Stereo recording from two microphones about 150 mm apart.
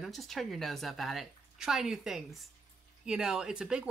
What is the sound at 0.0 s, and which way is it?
Speech, centre (ahead or behind).